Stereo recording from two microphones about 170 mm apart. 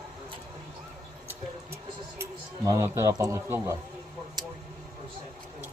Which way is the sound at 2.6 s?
20° right (ahead or behind).